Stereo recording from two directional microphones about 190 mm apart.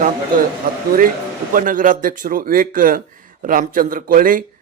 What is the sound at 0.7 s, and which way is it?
Speech, 50° right (ahead or behind).